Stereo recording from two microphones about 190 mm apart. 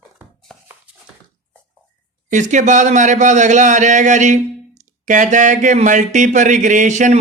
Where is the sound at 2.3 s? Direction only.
40° right (ahead or behind).